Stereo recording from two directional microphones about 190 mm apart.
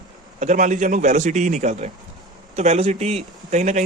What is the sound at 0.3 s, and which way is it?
Speech, 40° right (ahead or behind).